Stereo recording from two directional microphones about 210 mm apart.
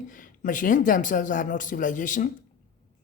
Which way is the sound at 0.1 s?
40° left (ahead or behind).